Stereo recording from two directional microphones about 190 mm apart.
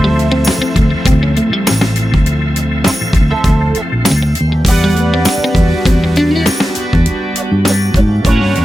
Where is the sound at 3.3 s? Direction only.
Centre (ahead or behind).